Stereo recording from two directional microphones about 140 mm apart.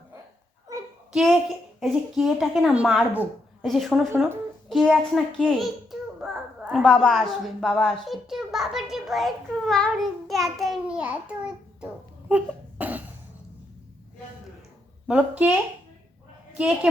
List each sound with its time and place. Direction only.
0.7 s a sound: 20° right (ahead or behind)
1.1 s a child's voice: 5° right (ahead or behind)
6.6 s a sound: 5° right (ahead or behind)
6.8 s a child's voice: 5° left (ahead or behind)
12.8 s cough: 10° right (ahead or behind)
15.0 s speech: 10° right (ahead or behind)
16.6 s speech: 5° right (ahead or behind)